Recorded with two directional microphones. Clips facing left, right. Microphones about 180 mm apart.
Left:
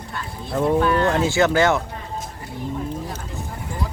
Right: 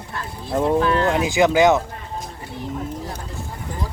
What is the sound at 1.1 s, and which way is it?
Speech, 15° right (ahead or behind).